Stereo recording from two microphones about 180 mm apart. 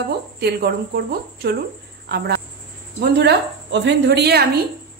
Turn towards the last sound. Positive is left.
turn(degrees=-60)  # may be behind; listen again after turning